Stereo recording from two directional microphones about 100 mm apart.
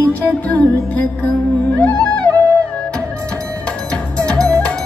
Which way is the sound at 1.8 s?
15° left (ahead or behind).